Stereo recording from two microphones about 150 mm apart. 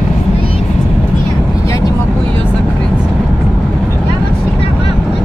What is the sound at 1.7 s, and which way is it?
Vehicle, 25° left (ahead or behind).